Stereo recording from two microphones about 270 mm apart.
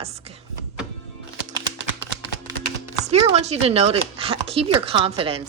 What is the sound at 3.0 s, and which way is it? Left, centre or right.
A woman's voice, right.